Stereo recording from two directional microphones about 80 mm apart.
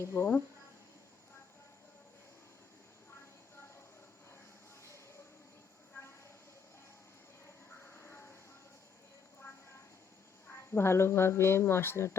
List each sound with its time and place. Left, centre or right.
0.0 s speech: left
7.7 s a sound: left
10.7 s speech: left